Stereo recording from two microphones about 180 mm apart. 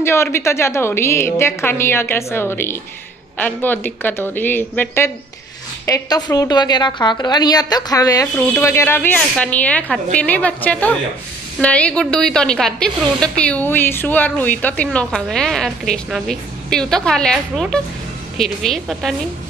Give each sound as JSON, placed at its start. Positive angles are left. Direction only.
{"t": 0.0, "sound": "a woman's voice", "side_deg": 15}